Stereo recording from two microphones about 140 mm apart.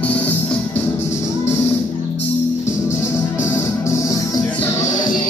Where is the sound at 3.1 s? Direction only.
15° left (ahead or behind).